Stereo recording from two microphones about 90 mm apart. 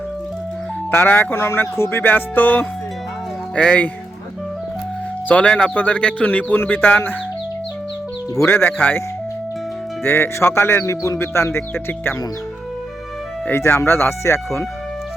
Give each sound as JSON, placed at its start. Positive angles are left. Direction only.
{"t": 0.9, "sound": "a man's voice", "side_deg": 25}
{"t": 5.3, "sound": "a man's voice", "side_deg": 10}
{"t": 8.4, "sound": "a man's voice", "side_deg": 25}
{"t": 13.5, "sound": "a man's voice", "side_deg": 25}